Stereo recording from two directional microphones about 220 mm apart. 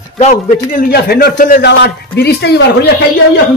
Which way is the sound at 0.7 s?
45° left (ahead or behind).